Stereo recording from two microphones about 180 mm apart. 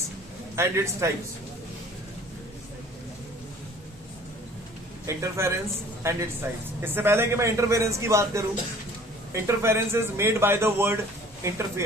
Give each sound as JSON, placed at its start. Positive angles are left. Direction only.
{"t": 0.5, "sound": "a man's voice", "side_deg": -15}
{"t": 5.0, "sound": "a man's voice", "side_deg": -15}